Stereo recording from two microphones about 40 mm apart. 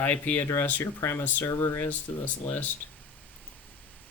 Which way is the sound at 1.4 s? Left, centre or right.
Left.